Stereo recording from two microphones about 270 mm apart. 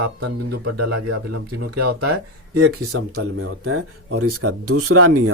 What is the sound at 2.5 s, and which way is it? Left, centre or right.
Speech, right.